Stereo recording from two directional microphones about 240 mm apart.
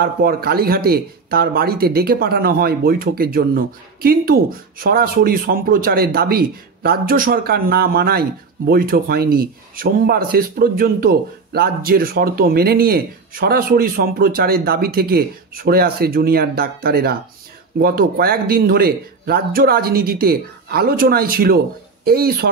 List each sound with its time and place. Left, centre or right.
0.0 s speech: right